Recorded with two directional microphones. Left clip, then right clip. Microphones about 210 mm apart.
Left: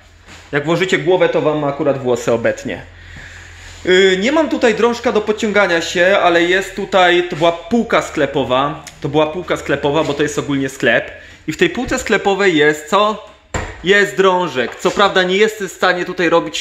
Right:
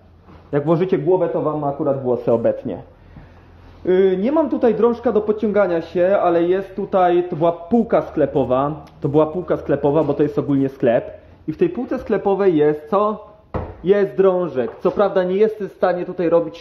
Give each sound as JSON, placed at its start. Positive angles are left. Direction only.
{"t": 0.5, "sound": "a man's voice", "side_deg": -10}
{"t": 1.0, "sound": "speech", "side_deg": 20}
{"t": 2.2, "sound": "speech", "side_deg": 0}
{"t": 3.8, "sound": "speech", "side_deg": 5}
{"t": 11.4, "sound": "speech", "side_deg": 10}